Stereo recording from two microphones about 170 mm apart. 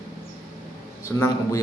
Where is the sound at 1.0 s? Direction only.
15° left (ahead or behind).